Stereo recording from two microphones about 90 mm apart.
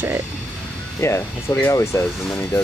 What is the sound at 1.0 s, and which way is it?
Speech, 30° left (ahead or behind).